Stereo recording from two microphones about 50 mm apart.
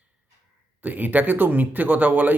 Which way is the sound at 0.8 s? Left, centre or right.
Right.